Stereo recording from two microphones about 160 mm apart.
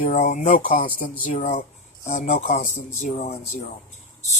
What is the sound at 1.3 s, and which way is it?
Speech, 50° left (ahead or behind).